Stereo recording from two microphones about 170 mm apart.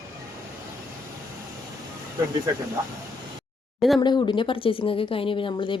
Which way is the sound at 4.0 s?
25° left (ahead or behind).